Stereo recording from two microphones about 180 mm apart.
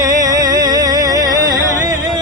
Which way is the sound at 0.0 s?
20° right (ahead or behind).